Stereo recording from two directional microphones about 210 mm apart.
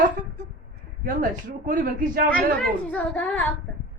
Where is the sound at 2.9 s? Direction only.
5° left (ahead or behind).